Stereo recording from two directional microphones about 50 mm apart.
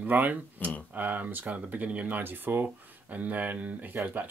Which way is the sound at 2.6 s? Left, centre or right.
Right.